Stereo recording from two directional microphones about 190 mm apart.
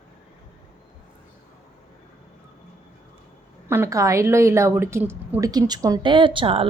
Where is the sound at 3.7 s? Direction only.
15° right (ahead or behind).